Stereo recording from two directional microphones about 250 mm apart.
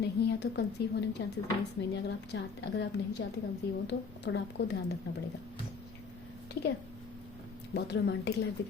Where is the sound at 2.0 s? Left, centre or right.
Left.